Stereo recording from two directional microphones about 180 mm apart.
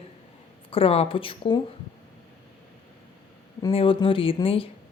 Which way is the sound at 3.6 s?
30° left (ahead or behind).